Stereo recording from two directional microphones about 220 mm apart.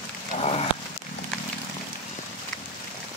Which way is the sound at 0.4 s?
30° left (ahead or behind).